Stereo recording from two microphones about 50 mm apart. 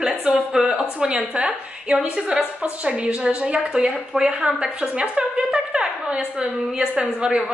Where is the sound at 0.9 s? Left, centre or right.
Right.